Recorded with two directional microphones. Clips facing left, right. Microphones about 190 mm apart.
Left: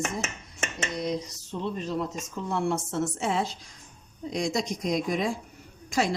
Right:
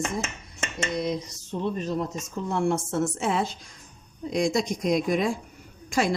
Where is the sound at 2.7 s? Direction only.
50° right (ahead or behind).